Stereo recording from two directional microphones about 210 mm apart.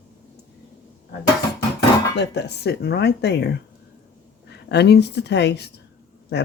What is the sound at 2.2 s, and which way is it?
Speech, 55° left (ahead or behind).